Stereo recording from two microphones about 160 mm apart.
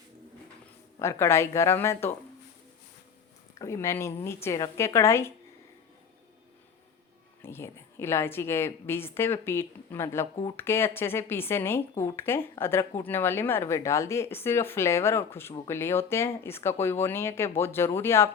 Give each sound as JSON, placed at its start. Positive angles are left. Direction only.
{"t": 0.9, "sound": "speech", "side_deg": 15}
{"t": 3.5, "sound": "speech", "side_deg": 20}
{"t": 7.4, "sound": "speech", "side_deg": 15}